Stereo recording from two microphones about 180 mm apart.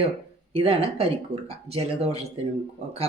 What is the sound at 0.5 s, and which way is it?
Speech, 30° right (ahead or behind).